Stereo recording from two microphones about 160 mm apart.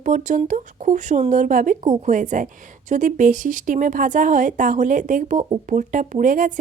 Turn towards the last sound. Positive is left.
turn(degrees=-55)  # may be behind; listen again after turning